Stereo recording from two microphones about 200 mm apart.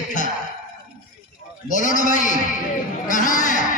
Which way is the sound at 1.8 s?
40° left (ahead or behind).